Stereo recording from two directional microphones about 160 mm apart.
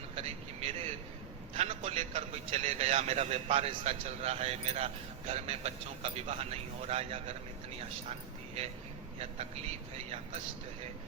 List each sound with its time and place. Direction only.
0.2 s a sound: 35° right (ahead or behind)
1.5 s a man's voice: 40° right (ahead or behind)
9.1 s speech: 40° right (ahead or behind)